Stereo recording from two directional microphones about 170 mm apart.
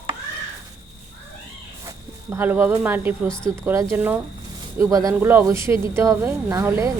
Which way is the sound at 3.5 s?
15° right (ahead or behind).